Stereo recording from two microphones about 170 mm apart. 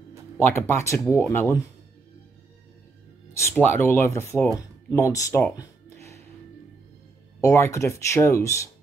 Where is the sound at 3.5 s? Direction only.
10° left (ahead or behind).